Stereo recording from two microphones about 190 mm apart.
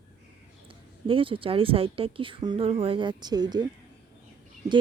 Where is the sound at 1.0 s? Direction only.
30° right (ahead or behind).